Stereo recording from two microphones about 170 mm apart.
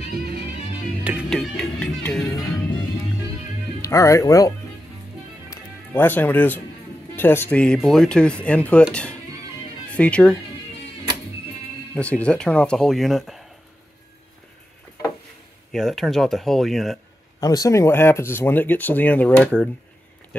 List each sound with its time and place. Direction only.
1.3 s music: 5° left (ahead or behind)
3.8 s speech: 20° left (ahead or behind)
5.5 s music: 10° left (ahead or behind)
7.2 s speech: 10° left (ahead or behind)
9.8 s speech: 5° left (ahead or behind)
11.9 s speech: 5° left (ahead or behind)
15.7 s speech: centre (ahead or behind)
17.4 s speech: 20° left (ahead or behind)